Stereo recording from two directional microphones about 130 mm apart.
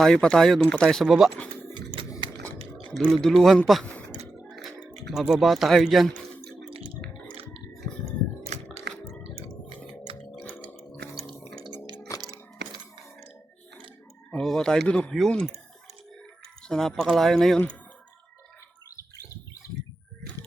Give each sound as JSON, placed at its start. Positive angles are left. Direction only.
{"t": 0.0, "sound": "speech", "side_deg": 5}
{"t": 3.0, "sound": "speech", "side_deg": 5}
{"t": 5.3, "sound": "speech", "side_deg": 0}
{"t": 8.5, "sound": "a sound", "side_deg": -60}
{"t": 10.1, "sound": "music", "side_deg": -45}
{"t": 11.9, "sound": "a sound", "side_deg": 20}
{"t": 12.2, "sound": "coin", "side_deg": -30}
{"t": 14.3, "sound": "speech", "side_deg": 5}
{"t": 16.6, "sound": "speech", "side_deg": 5}